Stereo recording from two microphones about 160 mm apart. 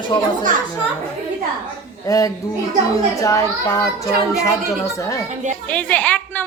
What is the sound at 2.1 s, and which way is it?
A child's voice, 20° left (ahead or behind).